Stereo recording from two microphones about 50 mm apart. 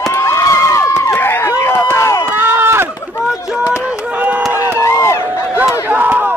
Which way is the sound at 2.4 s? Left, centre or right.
Right.